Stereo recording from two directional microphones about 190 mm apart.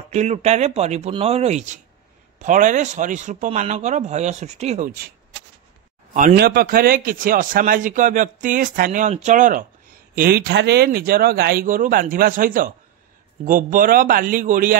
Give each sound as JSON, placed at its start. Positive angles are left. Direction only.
{"t": 0.1, "sound": "speech", "side_deg": -35}
{"t": 6.1, "sound": "a man's voice", "side_deg": -50}
{"t": 10.1, "sound": "a man's voice", "side_deg": -55}